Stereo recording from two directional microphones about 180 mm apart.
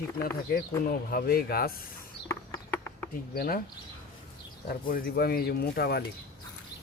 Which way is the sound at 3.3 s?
55° left (ahead or behind).